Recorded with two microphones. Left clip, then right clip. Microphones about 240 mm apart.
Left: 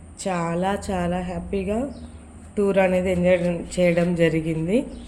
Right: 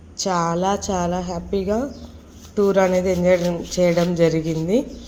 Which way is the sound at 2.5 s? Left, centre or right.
Centre.